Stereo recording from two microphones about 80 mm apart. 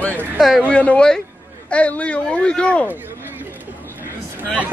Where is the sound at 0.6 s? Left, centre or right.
Centre.